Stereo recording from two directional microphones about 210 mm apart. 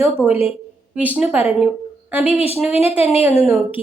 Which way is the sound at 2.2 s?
30° left (ahead or behind).